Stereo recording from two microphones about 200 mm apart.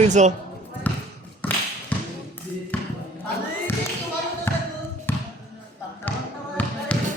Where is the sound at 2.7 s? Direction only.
5° left (ahead or behind).